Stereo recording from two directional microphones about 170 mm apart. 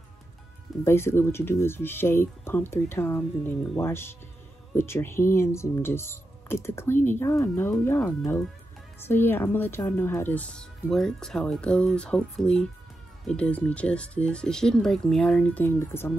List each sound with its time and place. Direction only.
0.8 s speech: 15° left (ahead or behind)